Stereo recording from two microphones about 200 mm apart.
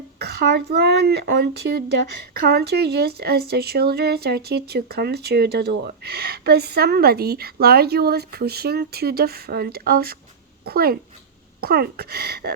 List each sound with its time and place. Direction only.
0.2 s speech: 55° right (ahead or behind)